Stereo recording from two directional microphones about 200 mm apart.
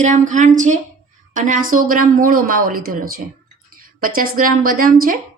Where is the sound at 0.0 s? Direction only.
40° right (ahead or behind).